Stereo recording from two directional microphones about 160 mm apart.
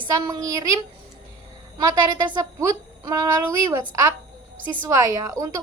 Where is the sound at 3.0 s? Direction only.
25° right (ahead or behind).